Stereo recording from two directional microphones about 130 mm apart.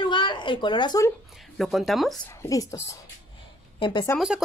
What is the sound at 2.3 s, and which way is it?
Speech, 25° left (ahead or behind).